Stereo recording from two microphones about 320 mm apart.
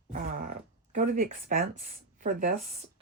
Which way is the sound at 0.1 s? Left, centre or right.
Right.